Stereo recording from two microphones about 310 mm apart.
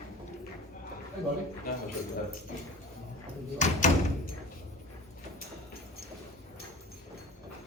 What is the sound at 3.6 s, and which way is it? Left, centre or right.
Speech, left.